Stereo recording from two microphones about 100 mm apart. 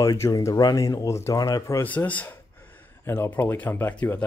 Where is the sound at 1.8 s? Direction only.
15° left (ahead or behind).